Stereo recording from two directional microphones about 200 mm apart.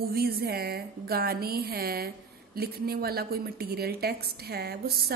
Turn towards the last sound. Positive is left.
turn(degrees=-50)  # may be behind; listen again after turning